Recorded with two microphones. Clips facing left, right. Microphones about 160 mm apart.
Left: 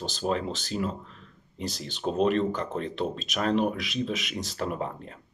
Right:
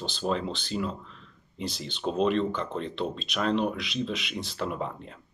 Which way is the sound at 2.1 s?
45° left (ahead or behind).